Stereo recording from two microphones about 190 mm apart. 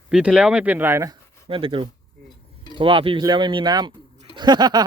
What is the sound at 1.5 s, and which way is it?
Speech, 30° right (ahead or behind).